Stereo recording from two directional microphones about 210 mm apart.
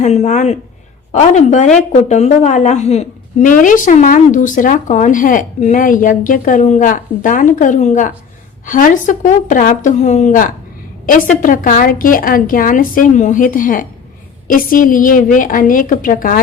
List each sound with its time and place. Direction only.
0.0 s speech: 35° left (ahead or behind)